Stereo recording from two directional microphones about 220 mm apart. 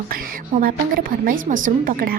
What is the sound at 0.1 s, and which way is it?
A woman's voice, 40° right (ahead or behind).